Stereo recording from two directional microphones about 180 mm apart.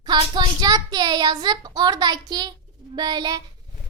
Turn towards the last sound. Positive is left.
turn(degrees=-20)  # may be behind; listen again after turning